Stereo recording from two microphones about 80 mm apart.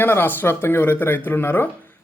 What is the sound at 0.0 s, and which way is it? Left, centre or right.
A man's voice, left.